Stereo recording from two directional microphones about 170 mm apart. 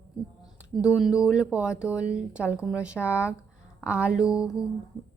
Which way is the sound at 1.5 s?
5° right (ahead or behind).